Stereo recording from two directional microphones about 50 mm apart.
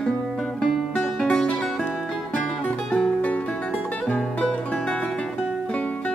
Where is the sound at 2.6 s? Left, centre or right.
Left.